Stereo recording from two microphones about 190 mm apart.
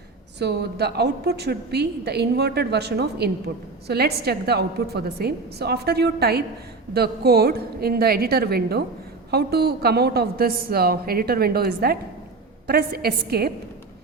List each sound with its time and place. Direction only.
0.3 s a woman's voice: 60° right (ahead or behind)